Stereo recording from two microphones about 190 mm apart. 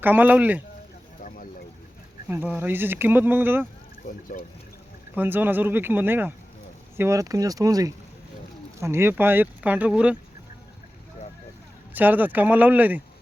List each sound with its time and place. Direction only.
0.0 s speech: 10° right (ahead or behind)
2.3 s speech: 10° right (ahead or behind)
4.3 s speech: 50° left (ahead or behind)
5.1 s speech: 10° right (ahead or behind)
11.9 s speech: 10° right (ahead or behind)